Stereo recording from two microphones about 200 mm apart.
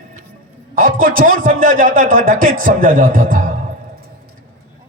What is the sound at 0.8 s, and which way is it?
A man's voice, 45° right (ahead or behind).